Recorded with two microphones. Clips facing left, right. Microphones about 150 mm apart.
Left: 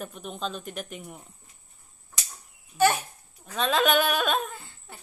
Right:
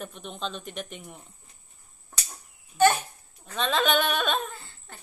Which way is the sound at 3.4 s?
5° left (ahead or behind).